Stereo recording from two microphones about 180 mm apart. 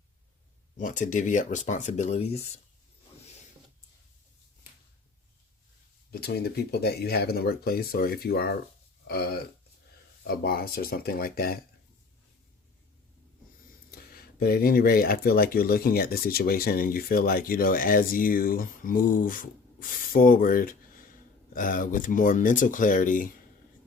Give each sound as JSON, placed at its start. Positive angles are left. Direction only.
{"t": 0.8, "sound": "speech", "side_deg": 45}
{"t": 6.1, "sound": "speech", "side_deg": 60}
{"t": 13.9, "sound": "speech", "side_deg": 55}